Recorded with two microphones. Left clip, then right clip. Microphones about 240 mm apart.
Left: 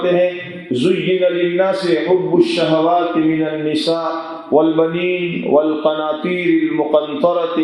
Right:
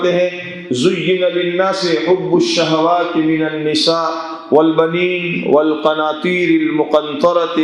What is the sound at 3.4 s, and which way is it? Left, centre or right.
Mantra, right.